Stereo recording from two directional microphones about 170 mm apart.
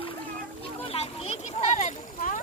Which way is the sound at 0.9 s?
35° left (ahead or behind).